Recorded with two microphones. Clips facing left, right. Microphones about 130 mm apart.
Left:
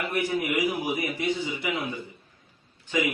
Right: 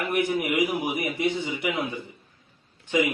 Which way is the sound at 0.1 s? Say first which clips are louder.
Right 3 dB; 20° right (ahead or behind).